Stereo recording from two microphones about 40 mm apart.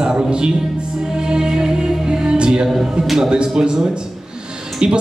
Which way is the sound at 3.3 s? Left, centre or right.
Right.